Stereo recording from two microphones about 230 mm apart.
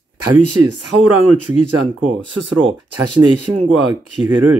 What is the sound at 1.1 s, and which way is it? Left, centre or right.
Speech, right.